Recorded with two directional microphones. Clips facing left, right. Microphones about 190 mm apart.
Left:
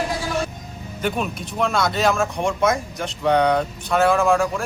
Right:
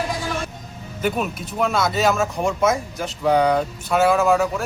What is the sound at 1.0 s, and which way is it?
Speech, 5° right (ahead or behind).